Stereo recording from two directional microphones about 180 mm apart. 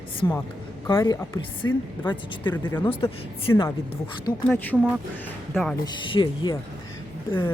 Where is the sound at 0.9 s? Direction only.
20° left (ahead or behind).